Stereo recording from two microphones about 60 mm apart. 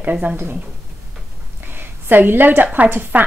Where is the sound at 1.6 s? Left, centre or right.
Right.